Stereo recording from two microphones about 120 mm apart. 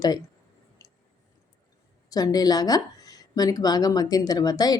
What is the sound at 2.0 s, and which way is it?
Speech, 30° left (ahead or behind).